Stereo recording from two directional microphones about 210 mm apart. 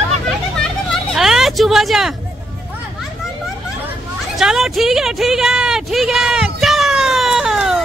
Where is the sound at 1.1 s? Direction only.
Centre (ahead or behind).